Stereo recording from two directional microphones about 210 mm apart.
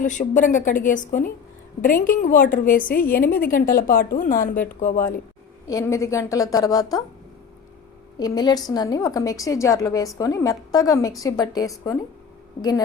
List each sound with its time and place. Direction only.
0.0 s a woman's voice: 35° left (ahead or behind)
5.6 s a woman's voice: 15° left (ahead or behind)
8.2 s a woman's voice: 20° left (ahead or behind)